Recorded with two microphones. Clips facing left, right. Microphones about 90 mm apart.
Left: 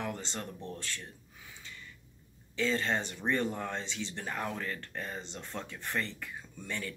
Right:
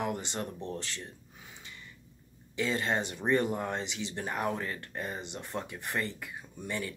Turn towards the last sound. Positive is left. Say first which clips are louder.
# right 3 dB
turn(degrees=-15)  # may be behind; listen again after turning